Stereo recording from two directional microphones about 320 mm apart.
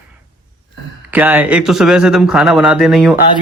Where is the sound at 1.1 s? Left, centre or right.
Centre.